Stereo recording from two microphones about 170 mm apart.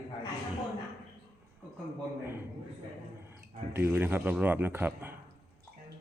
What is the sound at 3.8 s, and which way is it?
Speech, 15° right (ahead or behind).